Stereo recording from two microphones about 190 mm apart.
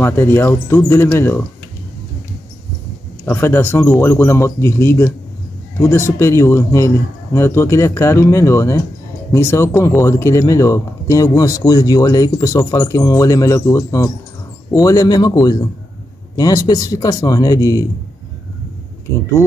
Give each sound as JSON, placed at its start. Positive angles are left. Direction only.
{"t": 0.0, "sound": "speech", "side_deg": 10}
{"t": 3.3, "sound": "speech", "side_deg": 10}